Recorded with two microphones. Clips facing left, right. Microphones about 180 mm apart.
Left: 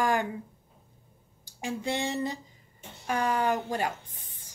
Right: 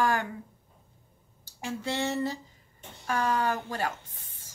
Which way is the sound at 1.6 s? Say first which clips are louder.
Left 1 dB; 15° left (ahead or behind).